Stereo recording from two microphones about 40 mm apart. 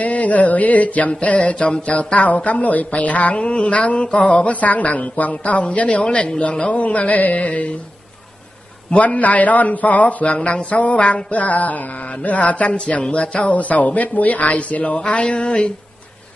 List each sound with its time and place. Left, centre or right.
0.0 s a man's voice: left
3.3 s a man's voice: left
5.4 s a man's voice: left
6.0 s a sound: left
6.6 s a man's voice: left
9.0 s a man's voice: left
15.0 s a sound: left